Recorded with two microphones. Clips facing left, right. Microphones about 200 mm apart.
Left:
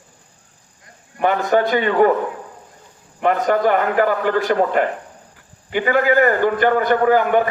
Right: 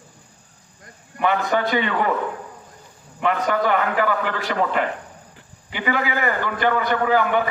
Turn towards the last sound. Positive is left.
turn(degrees=45)  # may be behind; listen again after turning